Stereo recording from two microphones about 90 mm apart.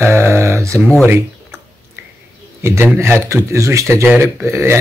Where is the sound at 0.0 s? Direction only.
30° right (ahead or behind).